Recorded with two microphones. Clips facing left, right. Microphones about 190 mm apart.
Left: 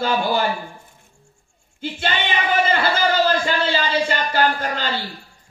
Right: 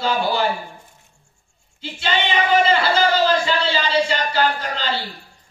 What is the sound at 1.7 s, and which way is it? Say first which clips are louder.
A man's voice: right 1 dB; 50° left (ahead or behind).